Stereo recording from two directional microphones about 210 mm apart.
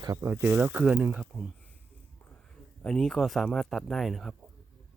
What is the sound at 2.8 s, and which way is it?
Speech, 5° left (ahead or behind).